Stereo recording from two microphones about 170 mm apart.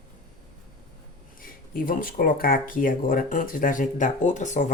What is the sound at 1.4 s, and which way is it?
Speech, 55° left (ahead or behind).